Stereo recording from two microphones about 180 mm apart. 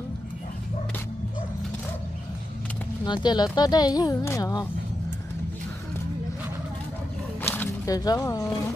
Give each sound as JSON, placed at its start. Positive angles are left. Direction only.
{"t": 3.3, "sound": "speech", "side_deg": 25}
{"t": 7.4, "sound": "music", "side_deg": 10}